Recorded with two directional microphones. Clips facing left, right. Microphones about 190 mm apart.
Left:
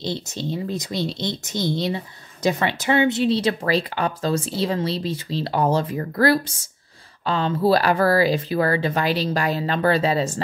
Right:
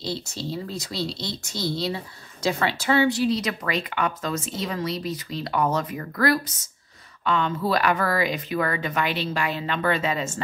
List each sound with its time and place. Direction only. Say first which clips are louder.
0.0 s speech: left 3 dB; 20° left (ahead or behind)